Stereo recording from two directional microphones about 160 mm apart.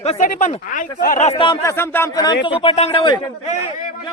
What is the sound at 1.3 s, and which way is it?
Speech, 30° left (ahead or behind).